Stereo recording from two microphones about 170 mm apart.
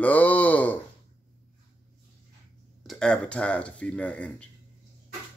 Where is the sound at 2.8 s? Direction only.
5° left (ahead or behind).